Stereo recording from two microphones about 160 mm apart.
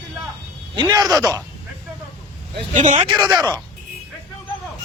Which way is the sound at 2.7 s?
50° right (ahead or behind).